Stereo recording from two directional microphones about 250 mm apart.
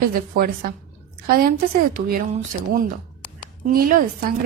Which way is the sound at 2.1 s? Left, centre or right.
Right.